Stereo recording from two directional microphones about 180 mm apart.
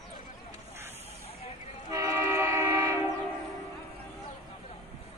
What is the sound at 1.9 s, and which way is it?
Train, 15° right (ahead or behind).